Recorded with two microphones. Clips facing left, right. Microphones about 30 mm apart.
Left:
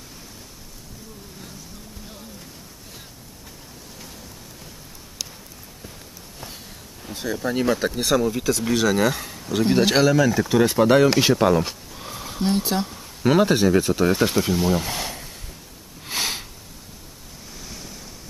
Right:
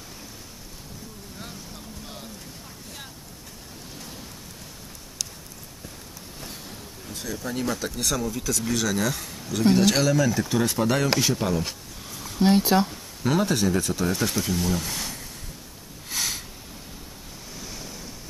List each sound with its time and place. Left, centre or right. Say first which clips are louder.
7.1 s speech: left 6 dB; centre
12.0 s a sound: left 4 dB; left
12.4 s speech: right 3 dB; centre
13.2 s speech: left 6 dB; left
16.1 s a sound: left 4 dB; left
17.6 s waves: even; centre